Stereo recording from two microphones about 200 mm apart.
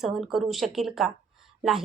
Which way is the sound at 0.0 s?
Centre (ahead or behind).